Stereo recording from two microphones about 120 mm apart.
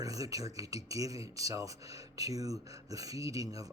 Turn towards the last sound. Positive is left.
turn(degrees=-30)  # may be behind; listen again after turning